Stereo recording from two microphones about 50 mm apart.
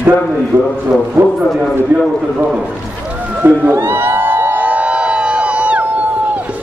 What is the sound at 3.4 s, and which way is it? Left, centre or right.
Speech, right.